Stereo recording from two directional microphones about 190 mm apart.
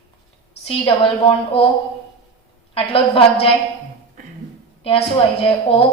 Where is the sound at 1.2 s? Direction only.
30° left (ahead or behind).